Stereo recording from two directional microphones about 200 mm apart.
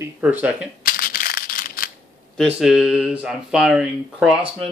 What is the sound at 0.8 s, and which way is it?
Crushing, 45° left (ahead or behind).